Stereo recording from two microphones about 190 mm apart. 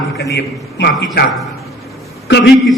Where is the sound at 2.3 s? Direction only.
65° left (ahead or behind).